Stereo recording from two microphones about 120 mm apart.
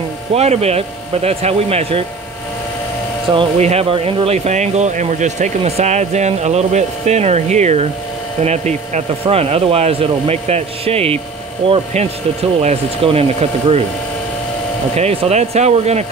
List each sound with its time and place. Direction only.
0.3 s speech: 60° right (ahead or behind)
3.5 s speech: 65° right (ahead or behind)
3.9 s speech: 45° right (ahead or behind)
4.5 s speech: 70° right (ahead or behind)
5.6 s speech: 60° right (ahead or behind)
15.0 s speech: 60° right (ahead or behind)